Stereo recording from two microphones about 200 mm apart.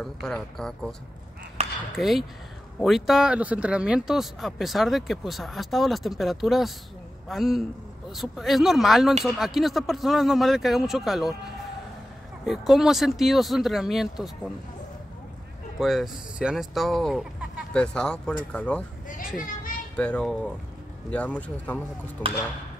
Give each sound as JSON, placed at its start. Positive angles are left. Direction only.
{"t": 0.0, "sound": "speech", "side_deg": 0}
{"t": 1.6, "sound": "a sound", "side_deg": -35}
{"t": 2.0, "sound": "speech", "side_deg": 0}
{"t": 12.4, "sound": "speech", "side_deg": 0}
{"t": 15.8, "sound": "speech", "side_deg": 0}
{"t": 19.0, "sound": "children playing", "side_deg": 40}
{"t": 20.0, "sound": "speech", "side_deg": 5}